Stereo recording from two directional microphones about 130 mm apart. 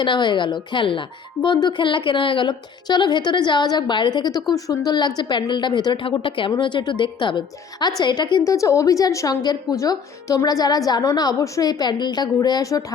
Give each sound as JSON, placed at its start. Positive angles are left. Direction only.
{"t": 0.0, "sound": "a woman's voice", "side_deg": 35}